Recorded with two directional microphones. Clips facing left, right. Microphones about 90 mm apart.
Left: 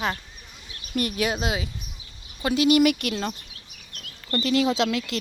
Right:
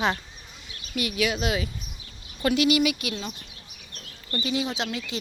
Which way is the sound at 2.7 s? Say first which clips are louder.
Left 4 dB; 50° left (ahead or behind).